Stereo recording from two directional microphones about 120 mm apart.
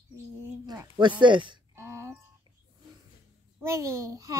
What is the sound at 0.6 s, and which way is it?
Speech, 35° right (ahead or behind).